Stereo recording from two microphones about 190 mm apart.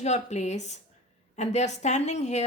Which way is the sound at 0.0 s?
35° left (ahead or behind).